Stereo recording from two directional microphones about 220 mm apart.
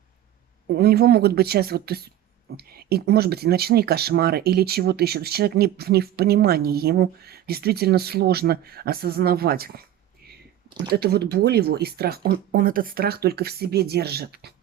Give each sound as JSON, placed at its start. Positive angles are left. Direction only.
{"t": 0.7, "sound": "speech", "side_deg": -45}
{"t": 10.9, "sound": "speech", "side_deg": -45}